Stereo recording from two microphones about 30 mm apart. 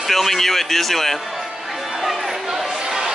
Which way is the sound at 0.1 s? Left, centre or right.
Centre.